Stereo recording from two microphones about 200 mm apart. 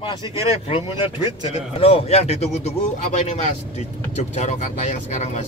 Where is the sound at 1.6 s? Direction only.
30° left (ahead or behind).